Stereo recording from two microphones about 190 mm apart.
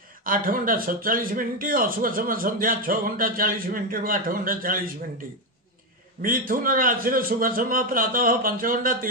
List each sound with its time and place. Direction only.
0.2 s a man's voice: 45° right (ahead or behind)
6.2 s a man's voice: 50° right (ahead or behind)